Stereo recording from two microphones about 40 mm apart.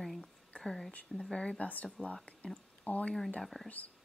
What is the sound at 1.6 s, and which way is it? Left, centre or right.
Speech, left.